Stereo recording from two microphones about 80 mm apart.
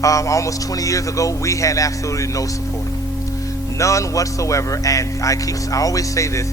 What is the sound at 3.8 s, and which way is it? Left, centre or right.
A man's voice, left.